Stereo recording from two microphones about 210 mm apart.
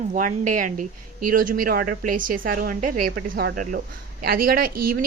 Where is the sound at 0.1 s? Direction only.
40° right (ahead or behind).